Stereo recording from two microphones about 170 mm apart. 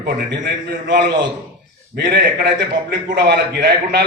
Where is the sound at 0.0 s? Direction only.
90° right.